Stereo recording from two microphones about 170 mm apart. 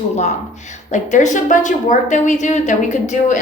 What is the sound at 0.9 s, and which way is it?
A woman's voice, 45° left (ahead or behind).